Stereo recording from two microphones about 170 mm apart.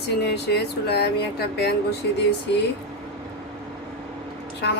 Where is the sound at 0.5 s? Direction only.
70° left (ahead or behind).